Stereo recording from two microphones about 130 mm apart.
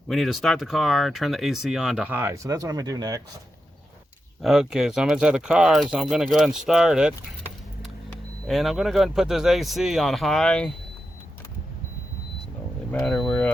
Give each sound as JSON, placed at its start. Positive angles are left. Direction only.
{"t": 0.1, "sound": "speech", "side_deg": 0}
{"t": 2.1, "sound": "speech", "side_deg": -20}
{"t": 4.4, "sound": "speech", "side_deg": -5}
{"t": 8.4, "sound": "speech", "side_deg": 0}
{"t": 12.9, "sound": "vehicle", "side_deg": 5}